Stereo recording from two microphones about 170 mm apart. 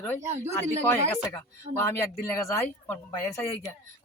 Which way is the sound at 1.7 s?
15° left (ahead or behind).